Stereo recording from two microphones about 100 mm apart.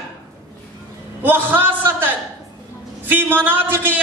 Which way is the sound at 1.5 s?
20° right (ahead or behind).